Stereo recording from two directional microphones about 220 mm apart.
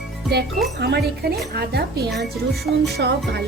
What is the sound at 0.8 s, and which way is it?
Speech, 45° right (ahead or behind).